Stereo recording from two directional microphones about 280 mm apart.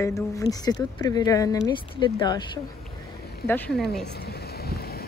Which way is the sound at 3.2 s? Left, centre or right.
Left.